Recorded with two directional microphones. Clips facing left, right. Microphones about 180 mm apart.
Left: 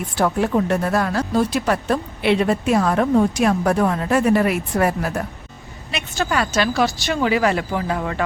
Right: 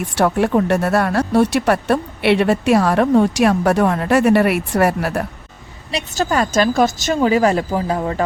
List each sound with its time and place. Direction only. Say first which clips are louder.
0.2 s speech: right 3 dB; 65° right (ahead or behind)
5.9 s a woman's voice: right 3 dB; 40° right (ahead or behind)